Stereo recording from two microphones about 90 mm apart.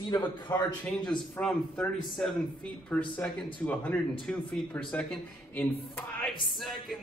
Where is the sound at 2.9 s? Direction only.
15° left (ahead or behind).